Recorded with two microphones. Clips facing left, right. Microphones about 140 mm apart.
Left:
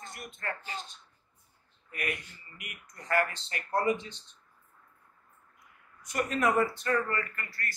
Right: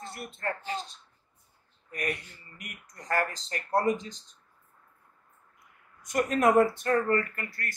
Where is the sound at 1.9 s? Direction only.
40° right (ahead or behind).